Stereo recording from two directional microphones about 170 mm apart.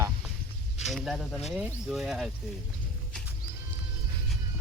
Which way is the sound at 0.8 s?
Centre (ahead or behind).